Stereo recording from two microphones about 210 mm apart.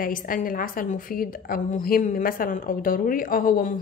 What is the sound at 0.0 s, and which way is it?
A woman's voice, 40° left (ahead or behind).